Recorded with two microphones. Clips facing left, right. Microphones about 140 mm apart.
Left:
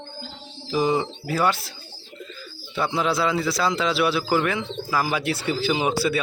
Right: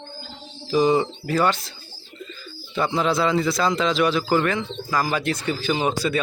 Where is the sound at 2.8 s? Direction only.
5° left (ahead or behind).